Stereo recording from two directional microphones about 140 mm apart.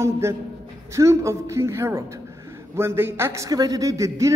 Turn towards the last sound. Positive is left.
turn(degrees=-20)  # may be behind; listen again after turning